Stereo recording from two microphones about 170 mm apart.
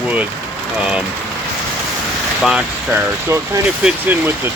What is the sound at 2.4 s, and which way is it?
Speech, 5° right (ahead or behind).